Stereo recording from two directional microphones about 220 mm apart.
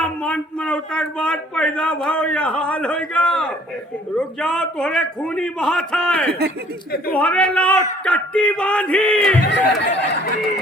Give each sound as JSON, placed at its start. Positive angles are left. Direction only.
{"t": 0.0, "sound": "a man's voice", "side_deg": 5}
{"t": 9.4, "sound": "speech", "side_deg": 50}